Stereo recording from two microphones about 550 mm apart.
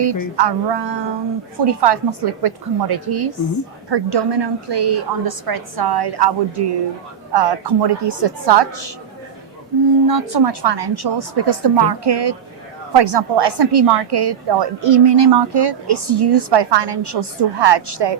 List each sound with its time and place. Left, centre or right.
0.3 s a woman's voice: right
10.1 s a woman's voice: right